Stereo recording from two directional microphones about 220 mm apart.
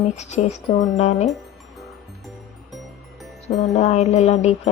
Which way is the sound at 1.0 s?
30° left (ahead or behind).